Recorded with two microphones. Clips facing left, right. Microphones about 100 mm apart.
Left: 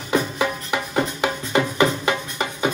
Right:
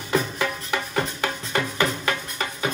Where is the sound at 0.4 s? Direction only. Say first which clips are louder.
Left 3 dB; 15° left (ahead or behind).